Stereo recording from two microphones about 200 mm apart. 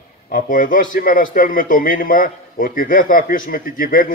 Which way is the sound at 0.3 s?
45° left (ahead or behind).